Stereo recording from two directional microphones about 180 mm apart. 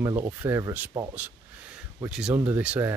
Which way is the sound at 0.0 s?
15° right (ahead or behind).